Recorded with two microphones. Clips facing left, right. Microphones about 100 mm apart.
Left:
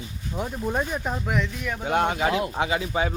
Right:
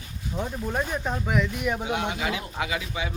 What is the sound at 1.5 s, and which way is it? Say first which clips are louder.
Speech: right 4 dB; 20° right (ahead or behind).